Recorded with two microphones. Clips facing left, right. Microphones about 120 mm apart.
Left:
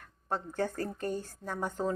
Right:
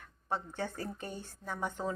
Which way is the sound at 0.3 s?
45° left (ahead or behind).